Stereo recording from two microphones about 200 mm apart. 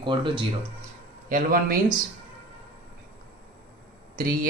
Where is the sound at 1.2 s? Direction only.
45° right (ahead or behind).